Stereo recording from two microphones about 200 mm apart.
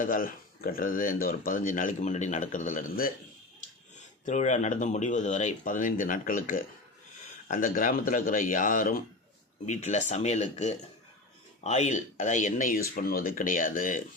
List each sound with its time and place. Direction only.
0.0 s speech: 45° left (ahead or behind)
4.3 s speech: 35° left (ahead or behind)